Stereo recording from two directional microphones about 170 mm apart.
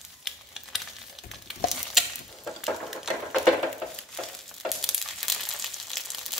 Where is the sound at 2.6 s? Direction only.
Centre (ahead or behind).